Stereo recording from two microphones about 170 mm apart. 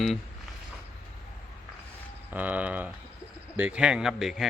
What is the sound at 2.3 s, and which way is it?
Speech, 10° right (ahead or behind).